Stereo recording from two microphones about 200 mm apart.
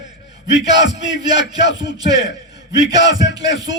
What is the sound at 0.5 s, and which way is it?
Speech, 65° left (ahead or behind).